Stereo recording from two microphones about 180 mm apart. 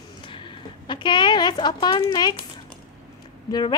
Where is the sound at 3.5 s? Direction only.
20° left (ahead or behind).